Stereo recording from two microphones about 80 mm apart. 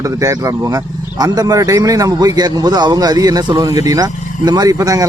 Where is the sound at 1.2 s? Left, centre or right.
Right.